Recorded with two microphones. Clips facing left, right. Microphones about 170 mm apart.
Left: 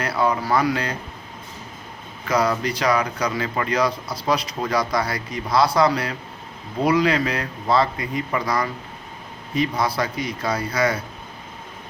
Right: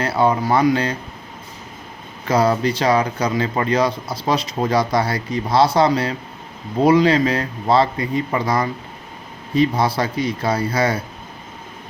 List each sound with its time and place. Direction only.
0.0 s speech: 25° right (ahead or behind)
2.2 s speech: 30° right (ahead or behind)